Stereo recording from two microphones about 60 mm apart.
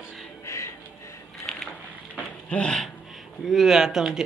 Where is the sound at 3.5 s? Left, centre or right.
Centre.